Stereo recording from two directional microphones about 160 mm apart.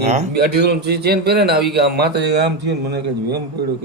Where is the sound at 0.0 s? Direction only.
45° right (ahead or behind).